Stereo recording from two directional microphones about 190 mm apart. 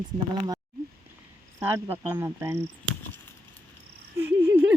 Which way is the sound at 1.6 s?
10° right (ahead or behind).